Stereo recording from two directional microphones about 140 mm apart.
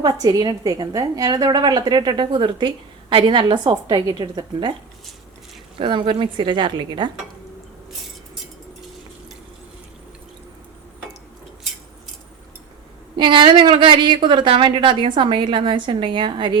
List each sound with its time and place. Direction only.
0.0 s a woman's voice: 30° right (ahead or behind)
5.7 s a woman's voice: 35° right (ahead or behind)
13.1 s a woman's voice: 35° right (ahead or behind)